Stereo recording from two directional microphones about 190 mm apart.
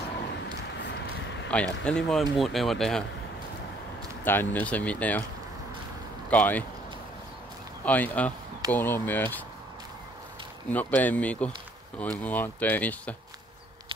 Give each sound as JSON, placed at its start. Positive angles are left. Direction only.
{"t": 0.7, "sound": "a sound", "side_deg": 65}
{"t": 1.5, "sound": "speech", "side_deg": 5}
{"t": 4.2, "sound": "speech", "side_deg": 10}
{"t": 6.3, "sound": "speech", "side_deg": 10}
{"t": 7.8, "sound": "speech", "side_deg": 10}
{"t": 10.7, "sound": "speech", "side_deg": 10}